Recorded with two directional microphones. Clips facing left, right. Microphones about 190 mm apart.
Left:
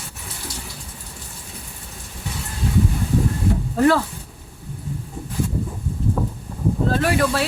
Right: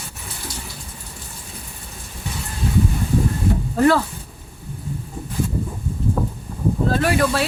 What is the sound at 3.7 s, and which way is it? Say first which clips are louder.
Speech: right 1 dB; centre (ahead or behind).